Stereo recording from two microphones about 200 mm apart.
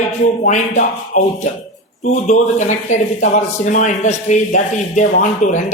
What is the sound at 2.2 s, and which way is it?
A man's voice, 35° left (ahead or behind).